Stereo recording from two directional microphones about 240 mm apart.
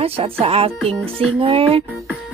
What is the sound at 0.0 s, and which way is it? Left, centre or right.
Speech, right.